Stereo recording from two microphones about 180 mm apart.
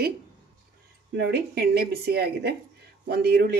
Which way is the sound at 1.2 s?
65° right (ahead or behind).